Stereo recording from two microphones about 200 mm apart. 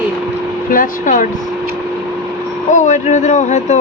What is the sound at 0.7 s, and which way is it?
Speech, 40° left (ahead or behind).